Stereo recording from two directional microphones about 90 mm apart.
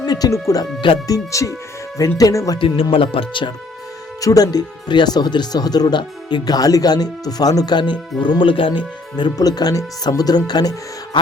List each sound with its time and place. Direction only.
0.0 s speech: 45° left (ahead or behind)
2.6 s speech: 75° left (ahead or behind)
4.2 s speech: 45° left (ahead or behind); by 8.8 s 75° left (ahead or behind)
9.1 s speech: 50° left (ahead or behind)